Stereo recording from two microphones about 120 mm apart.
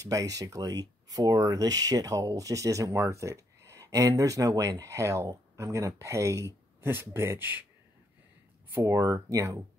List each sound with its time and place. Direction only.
0.0 s speech: 30° right (ahead or behind)
8.7 s speech: 25° right (ahead or behind)